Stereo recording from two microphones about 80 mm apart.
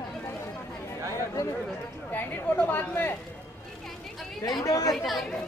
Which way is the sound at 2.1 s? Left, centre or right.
Left.